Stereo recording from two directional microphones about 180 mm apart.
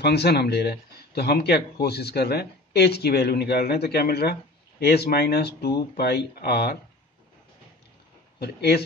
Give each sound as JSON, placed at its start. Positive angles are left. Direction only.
{"t": 0.0, "sound": "speech", "side_deg": 65}
{"t": 8.4, "sound": "speech", "side_deg": 60}